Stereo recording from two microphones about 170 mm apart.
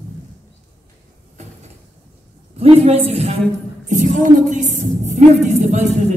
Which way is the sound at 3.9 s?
50° right (ahead or behind).